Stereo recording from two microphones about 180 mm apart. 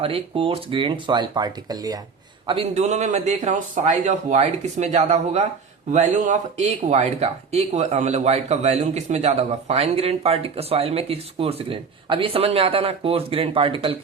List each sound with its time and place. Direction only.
0.0 s speech: 30° right (ahead or behind)
2.5 s speech: 35° right (ahead or behind)